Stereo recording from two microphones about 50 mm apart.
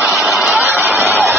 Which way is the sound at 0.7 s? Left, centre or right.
Right.